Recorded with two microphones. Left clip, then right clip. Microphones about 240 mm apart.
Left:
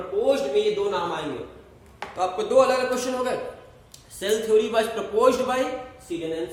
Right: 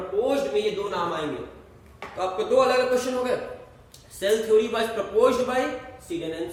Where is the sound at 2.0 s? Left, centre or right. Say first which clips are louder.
Left 2 dB; centre.